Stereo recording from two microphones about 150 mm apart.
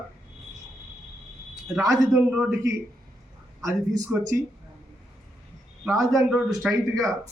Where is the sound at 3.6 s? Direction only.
20° right (ahead or behind).